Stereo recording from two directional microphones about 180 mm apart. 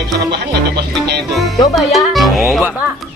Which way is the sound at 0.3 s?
65° right (ahead or behind).